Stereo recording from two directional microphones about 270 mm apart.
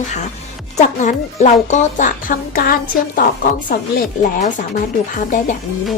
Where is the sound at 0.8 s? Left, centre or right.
Left.